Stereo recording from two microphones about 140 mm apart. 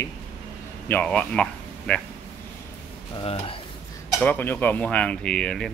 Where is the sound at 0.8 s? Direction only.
10° left (ahead or behind).